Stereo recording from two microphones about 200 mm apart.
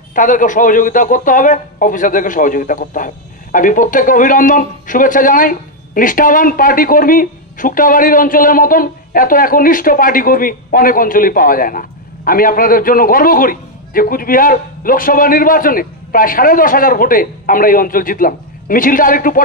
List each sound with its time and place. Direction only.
0.1 s a man's voice: 40° left (ahead or behind)